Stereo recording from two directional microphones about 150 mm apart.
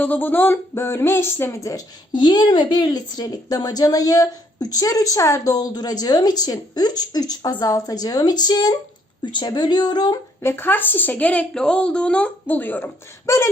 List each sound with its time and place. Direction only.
0.0 s speech: 10° left (ahead or behind); by 10.5 s 25° left (ahead or behind)
10.5 s speech: 15° left (ahead or behind)